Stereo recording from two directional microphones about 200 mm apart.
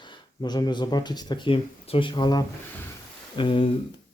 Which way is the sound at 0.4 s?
20° left (ahead or behind).